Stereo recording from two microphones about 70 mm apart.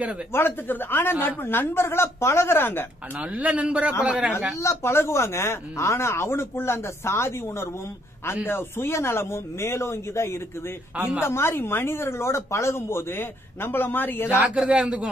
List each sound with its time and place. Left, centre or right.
0.3 s speech: left
3.2 s a man's voice: centre
4.6 s speech: left
14.3 s speech: centre